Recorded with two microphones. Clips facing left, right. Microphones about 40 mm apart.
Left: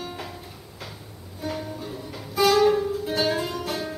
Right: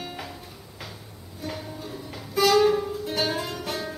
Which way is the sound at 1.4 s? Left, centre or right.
Centre.